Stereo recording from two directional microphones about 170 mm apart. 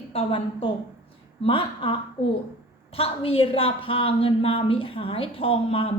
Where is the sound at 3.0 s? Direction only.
35° left (ahead or behind).